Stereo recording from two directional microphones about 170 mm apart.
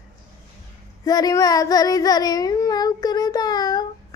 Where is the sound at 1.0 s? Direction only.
20° left (ahead or behind).